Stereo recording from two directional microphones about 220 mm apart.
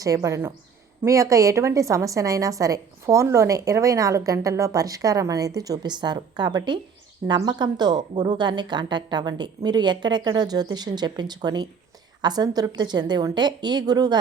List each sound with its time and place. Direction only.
0.0 s a woman's voice: 15° right (ahead or behind)